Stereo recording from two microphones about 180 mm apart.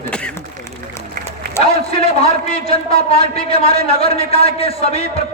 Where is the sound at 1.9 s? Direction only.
35° left (ahead or behind).